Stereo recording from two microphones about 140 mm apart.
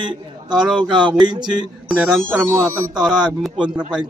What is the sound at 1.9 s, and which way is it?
Speech, 5° right (ahead or behind).